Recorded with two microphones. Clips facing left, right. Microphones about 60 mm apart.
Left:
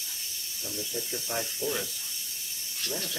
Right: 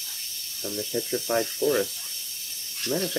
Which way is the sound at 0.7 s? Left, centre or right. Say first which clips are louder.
Right 8 dB; right.